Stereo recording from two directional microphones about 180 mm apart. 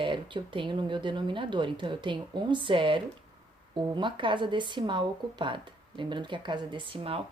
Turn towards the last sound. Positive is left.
turn(degrees=-30)  # may be behind; listen again after turning